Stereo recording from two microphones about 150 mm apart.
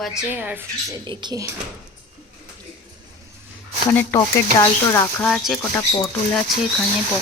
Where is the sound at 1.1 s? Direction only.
30° right (ahead or behind).